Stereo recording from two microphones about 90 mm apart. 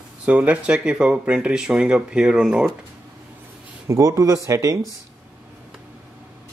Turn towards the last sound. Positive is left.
turn(degrees=-35)  # may be behind; listen again after turning